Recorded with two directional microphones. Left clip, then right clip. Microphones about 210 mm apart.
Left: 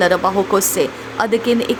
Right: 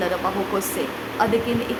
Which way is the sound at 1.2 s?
35° left (ahead or behind).